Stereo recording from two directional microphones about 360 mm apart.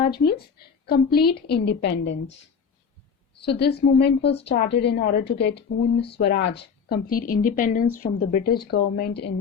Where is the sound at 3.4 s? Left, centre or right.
Left.